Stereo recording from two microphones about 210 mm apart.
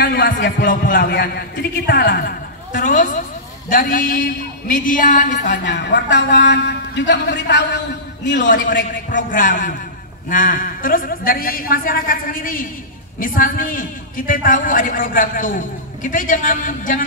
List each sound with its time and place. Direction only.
0.0 s a man's voice: 45° left (ahead or behind)
5.7 s a man's voice: 55° left (ahead or behind)
8.4 s a man's voice: 40° left (ahead or behind)